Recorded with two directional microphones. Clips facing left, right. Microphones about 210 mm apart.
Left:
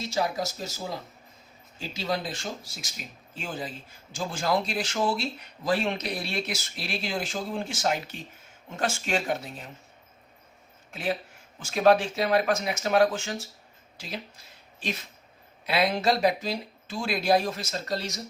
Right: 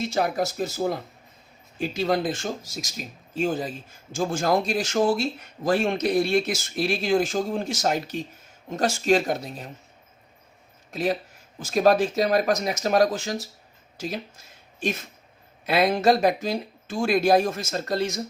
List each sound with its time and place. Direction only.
0.0 s speech: 55° right (ahead or behind)
10.9 s speech: 40° right (ahead or behind)